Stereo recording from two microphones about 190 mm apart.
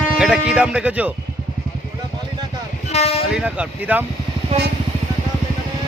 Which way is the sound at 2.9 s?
35° left (ahead or behind).